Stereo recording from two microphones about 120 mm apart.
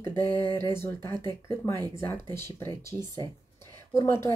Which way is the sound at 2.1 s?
20° left (ahead or behind).